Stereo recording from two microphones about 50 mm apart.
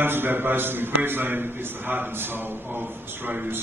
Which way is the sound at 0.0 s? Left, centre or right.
Right.